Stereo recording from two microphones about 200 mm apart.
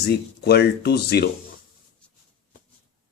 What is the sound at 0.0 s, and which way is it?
Speech, 55° left (ahead or behind).